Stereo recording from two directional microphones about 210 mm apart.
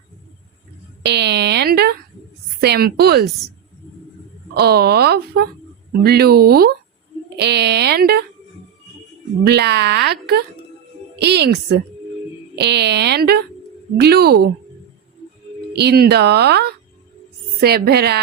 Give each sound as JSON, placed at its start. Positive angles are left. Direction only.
{"t": 1.0, "sound": "a sound", "side_deg": -55}
{"t": 2.6, "sound": "speech", "side_deg": -50}
{"t": 3.2, "sound": "a woman's voice", "side_deg": 0}
{"t": 4.5, "sound": "speech", "side_deg": -50}
{"t": 9.4, "sound": "speech", "side_deg": -50}
{"t": 11.2, "sound": "speech", "side_deg": -50}
{"t": 15.7, "sound": "speech", "side_deg": -50}